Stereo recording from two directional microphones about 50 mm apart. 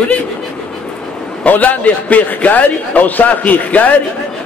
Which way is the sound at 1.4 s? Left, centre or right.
Left.